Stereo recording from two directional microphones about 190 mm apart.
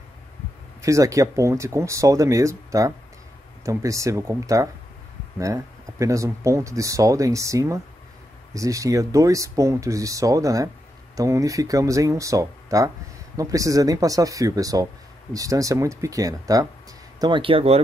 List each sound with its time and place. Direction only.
0.8 s speech: 15° right (ahead or behind)